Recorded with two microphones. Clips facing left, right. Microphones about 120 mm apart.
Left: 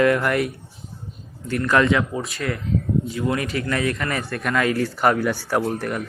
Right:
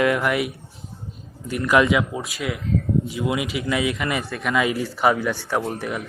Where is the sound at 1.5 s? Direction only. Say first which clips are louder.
Even; 10° right (ahead or behind).